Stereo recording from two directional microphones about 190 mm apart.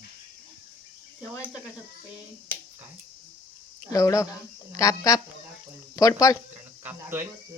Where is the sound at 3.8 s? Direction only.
15° left (ahead or behind).